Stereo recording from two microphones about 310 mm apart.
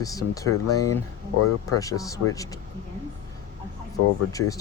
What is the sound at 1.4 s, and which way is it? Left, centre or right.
Speech, left.